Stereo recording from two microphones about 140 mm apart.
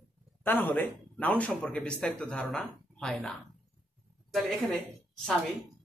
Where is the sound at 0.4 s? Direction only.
15° left (ahead or behind).